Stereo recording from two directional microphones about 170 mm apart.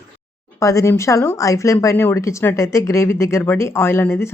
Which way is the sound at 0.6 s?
15° left (ahead or behind).